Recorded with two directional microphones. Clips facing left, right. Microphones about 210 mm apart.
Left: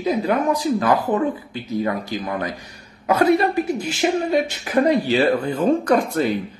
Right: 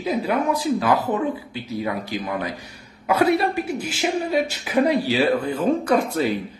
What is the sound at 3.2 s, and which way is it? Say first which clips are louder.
A woman's voice: left 2 dB; 5° right (ahead or behind).